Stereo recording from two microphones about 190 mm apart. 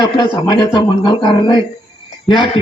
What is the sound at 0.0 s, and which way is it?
A man's voice, 25° left (ahead or behind).